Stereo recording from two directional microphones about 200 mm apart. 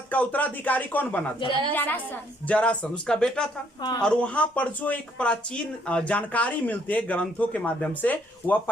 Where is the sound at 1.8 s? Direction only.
10° left (ahead or behind).